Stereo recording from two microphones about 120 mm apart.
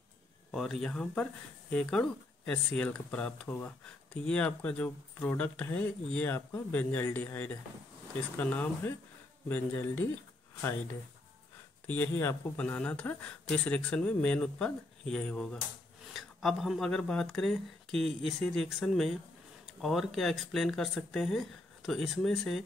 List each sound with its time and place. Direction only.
0.5 s speech: centre (ahead or behind); by 10.0 s 15° left (ahead or behind)
11.9 s speech: 20° left (ahead or behind); by 22.6 s centre (ahead or behind)